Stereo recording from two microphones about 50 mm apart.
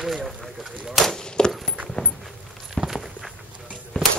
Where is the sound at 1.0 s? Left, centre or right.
Centre.